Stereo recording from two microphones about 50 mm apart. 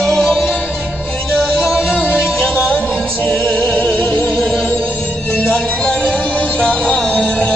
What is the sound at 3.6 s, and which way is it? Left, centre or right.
Music, left.